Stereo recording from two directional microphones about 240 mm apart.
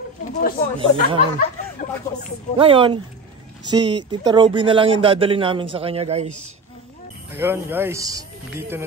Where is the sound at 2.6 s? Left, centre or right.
Right.